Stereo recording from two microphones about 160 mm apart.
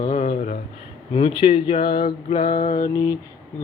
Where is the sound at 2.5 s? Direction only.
60° left (ahead or behind).